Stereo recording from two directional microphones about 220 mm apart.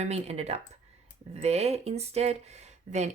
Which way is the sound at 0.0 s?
30° right (ahead or behind).